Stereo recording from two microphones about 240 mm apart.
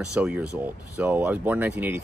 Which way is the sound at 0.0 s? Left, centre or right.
Centre.